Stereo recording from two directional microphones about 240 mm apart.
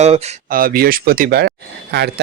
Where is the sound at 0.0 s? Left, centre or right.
Right.